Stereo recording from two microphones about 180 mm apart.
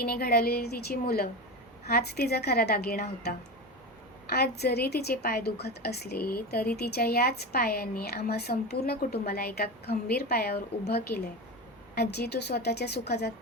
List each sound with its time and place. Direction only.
0.0 s a woman's voice: 60° left (ahead or behind)